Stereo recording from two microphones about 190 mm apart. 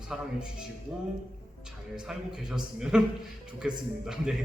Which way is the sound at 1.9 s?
5° right (ahead or behind).